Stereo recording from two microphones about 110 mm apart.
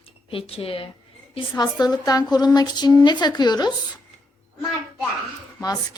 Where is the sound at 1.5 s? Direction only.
35° left (ahead or behind).